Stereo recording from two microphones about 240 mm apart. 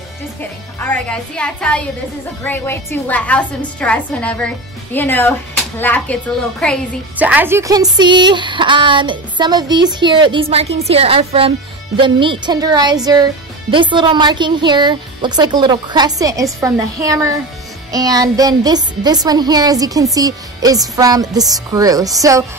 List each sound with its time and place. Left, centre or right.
0.4 s a woman's voice: centre
7.2 s a woman's voice: centre